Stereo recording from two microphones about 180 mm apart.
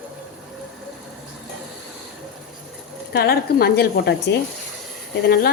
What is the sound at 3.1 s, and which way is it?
A woman's voice, 60° left (ahead or behind).